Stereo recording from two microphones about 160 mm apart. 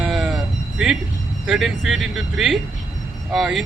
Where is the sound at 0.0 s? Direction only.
5° right (ahead or behind).